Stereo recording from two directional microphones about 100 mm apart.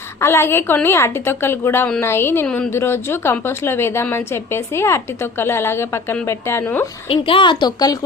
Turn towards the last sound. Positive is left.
turn(degrees=45)  # may be behind; listen again after turning